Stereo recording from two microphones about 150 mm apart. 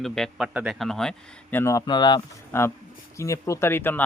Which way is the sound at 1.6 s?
20° left (ahead or behind).